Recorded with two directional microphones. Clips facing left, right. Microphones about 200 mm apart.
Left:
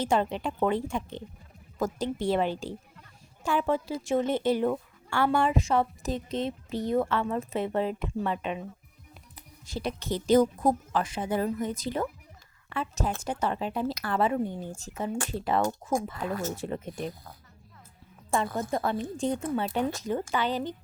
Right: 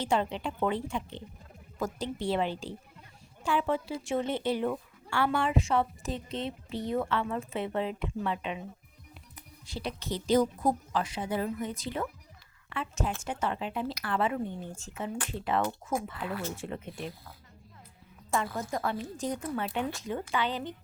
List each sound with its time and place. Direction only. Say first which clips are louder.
0.0 s a woman's voice: left 3 dB; 45° left (ahead or behind)
18.7 s a woman's voice: left 4 dB; 35° left (ahead or behind)